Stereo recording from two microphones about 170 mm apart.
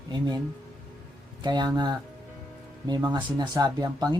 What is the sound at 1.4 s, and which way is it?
Speech, 25° right (ahead or behind).